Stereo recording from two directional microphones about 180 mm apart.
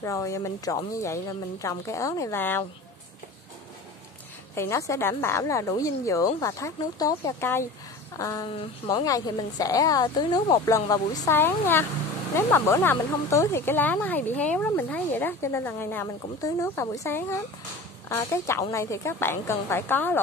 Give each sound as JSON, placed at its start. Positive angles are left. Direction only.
{"t": 0.0, "sound": "speech", "side_deg": 15}
{"t": 4.6, "sound": "a woman's voice", "side_deg": 15}